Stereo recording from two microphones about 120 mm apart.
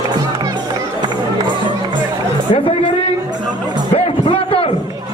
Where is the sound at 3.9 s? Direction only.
50° left (ahead or behind).